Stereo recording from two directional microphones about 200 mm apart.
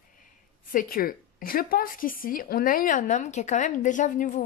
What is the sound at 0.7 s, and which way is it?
Speech, 45° left (ahead or behind).